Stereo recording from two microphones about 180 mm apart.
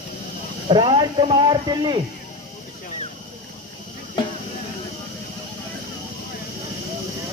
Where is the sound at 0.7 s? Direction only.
30° right (ahead or behind).